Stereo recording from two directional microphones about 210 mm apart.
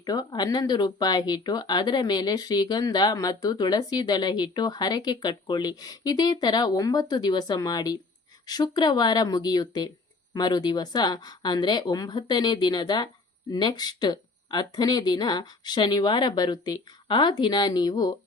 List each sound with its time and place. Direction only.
0.0 s speech: 20° left (ahead or behind)